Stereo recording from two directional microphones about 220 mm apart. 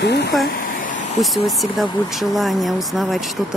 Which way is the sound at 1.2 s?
Centre (ahead or behind).